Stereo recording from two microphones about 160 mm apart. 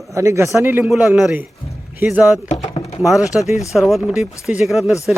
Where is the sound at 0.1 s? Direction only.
15° right (ahead or behind).